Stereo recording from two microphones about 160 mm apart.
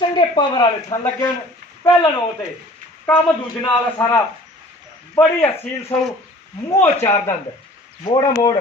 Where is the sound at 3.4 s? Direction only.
25° left (ahead or behind).